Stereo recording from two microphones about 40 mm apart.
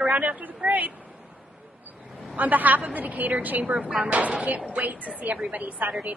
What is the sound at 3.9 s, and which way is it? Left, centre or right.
Speech, right.